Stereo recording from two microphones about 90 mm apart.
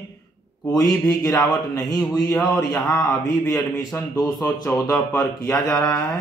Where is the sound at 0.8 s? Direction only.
40° left (ahead or behind).